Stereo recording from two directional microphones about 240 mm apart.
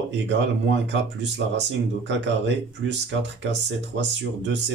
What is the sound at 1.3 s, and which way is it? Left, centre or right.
Speech, right.